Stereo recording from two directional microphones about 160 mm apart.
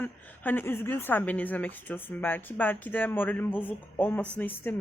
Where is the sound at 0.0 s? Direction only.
10° left (ahead or behind).